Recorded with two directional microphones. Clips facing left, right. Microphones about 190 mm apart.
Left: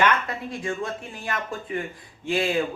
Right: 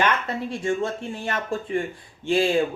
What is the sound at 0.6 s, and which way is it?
Speech, 25° right (ahead or behind).